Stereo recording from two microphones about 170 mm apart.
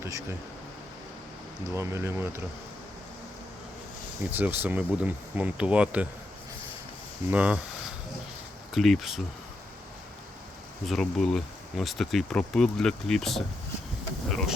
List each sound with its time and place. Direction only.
0.0 s a sound: 20° right (ahead or behind)
1.7 s speech: 15° right (ahead or behind)
4.3 s speech: 10° right (ahead or behind)
7.3 s speech: 10° right (ahead or behind)
8.7 s speech: centre (ahead or behind)
10.8 s speech: centre (ahead or behind)